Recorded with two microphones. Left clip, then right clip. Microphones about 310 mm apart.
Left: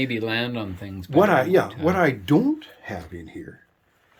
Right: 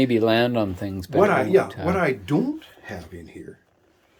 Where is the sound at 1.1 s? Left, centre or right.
Left.